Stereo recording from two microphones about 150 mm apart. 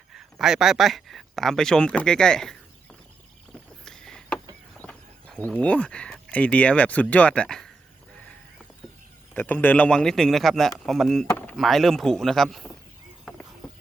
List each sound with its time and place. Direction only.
0.1 s speech: 5° right (ahead or behind)
3.8 s rowboat: 5° left (ahead or behind)
4.8 s speech: 10° left (ahead or behind)
9.3 s speech: 10° left (ahead or behind)
11.3 s chop: 15° left (ahead or behind)
11.5 s speech: centre (ahead or behind)